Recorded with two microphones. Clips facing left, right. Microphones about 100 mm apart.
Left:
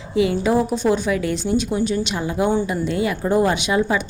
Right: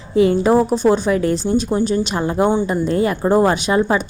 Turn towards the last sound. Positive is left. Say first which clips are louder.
# right 3 dB
turn(degrees=-40)  # may be behind; listen again after turning